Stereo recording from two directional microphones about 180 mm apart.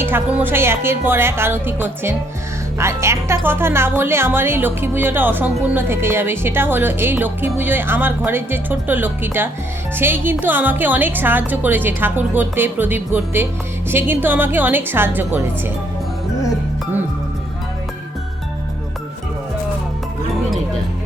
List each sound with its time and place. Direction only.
0.0 s speech: 10° right (ahead or behind)